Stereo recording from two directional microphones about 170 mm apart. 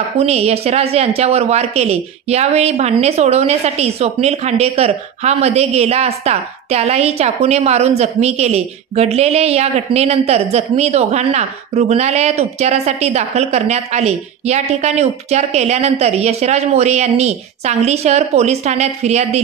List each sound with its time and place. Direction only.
0.2 s speech: 40° right (ahead or behind)